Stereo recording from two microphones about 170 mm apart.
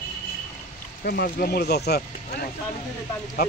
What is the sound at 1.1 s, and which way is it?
Speech, 60° left (ahead or behind).